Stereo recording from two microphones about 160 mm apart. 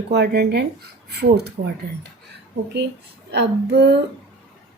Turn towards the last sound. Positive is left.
turn(degrees=-90)